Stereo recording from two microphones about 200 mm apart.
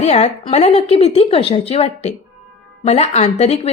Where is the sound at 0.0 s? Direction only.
30° left (ahead or behind).